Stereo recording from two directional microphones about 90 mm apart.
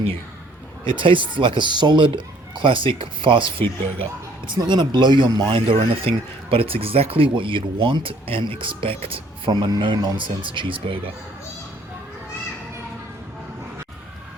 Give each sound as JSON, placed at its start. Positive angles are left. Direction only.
{"t": 0.9, "sound": "a man's voice", "side_deg": -70}
{"t": 4.7, "sound": "speech", "side_deg": -55}
{"t": 5.5, "sound": "a man's voice", "side_deg": -90}
{"t": 10.2, "sound": "a man's voice", "side_deg": -65}